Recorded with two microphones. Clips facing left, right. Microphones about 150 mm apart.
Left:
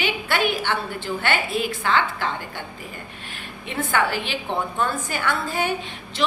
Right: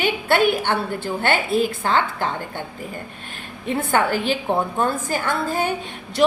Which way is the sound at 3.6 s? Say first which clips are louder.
Right 3 dB; 45° right (ahead or behind).